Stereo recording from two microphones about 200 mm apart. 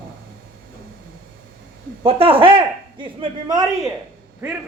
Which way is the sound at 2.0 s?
30° right (ahead or behind).